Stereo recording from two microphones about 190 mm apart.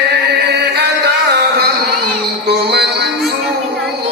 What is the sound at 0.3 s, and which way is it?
Music, 60° right (ahead or behind).